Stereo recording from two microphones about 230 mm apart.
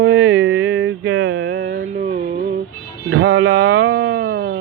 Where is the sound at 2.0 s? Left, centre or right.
Right.